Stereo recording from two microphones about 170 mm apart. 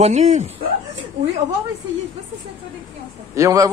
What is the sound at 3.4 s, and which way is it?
Speech, 20° right (ahead or behind).